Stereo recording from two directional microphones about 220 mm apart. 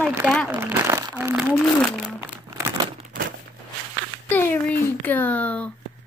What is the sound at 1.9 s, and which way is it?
Crumpling, 10° right (ahead or behind).